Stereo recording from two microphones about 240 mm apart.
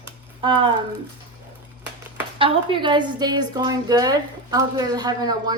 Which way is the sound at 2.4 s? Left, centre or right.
Right.